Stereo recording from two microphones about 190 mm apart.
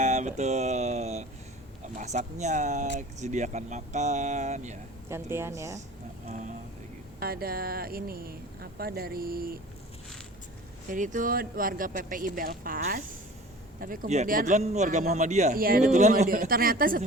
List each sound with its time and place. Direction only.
0.0 s music: 40° right (ahead or behind)
2.0 s speech: 40° right (ahead or behind)
5.0 s speech: 15° right (ahead or behind)
6.2 s a sound: 40° right (ahead or behind)
7.2 s speech: 55° right (ahead or behind)
10.8 s speech: 45° right (ahead or behind)
16.2 s speech: 50° right (ahead or behind)